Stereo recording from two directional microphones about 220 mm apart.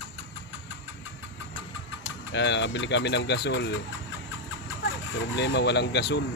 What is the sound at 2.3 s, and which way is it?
Speech, 55° left (ahead or behind).